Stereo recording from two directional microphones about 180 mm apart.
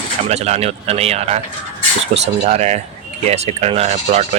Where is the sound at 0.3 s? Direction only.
35° right (ahead or behind).